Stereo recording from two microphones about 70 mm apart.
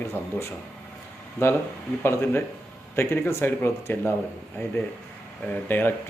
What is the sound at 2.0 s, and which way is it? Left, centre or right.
Speech, left.